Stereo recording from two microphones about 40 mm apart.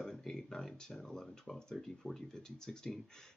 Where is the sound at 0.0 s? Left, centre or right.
Centre.